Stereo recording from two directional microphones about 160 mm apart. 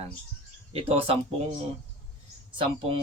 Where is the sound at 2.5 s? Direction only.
30° right (ahead or behind).